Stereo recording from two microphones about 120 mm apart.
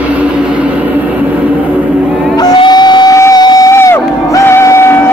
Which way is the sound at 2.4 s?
35° left (ahead or behind).